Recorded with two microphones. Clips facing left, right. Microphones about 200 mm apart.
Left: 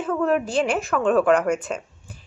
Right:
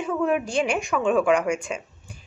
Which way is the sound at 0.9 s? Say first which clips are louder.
Left 2 dB; 10° right (ahead or behind).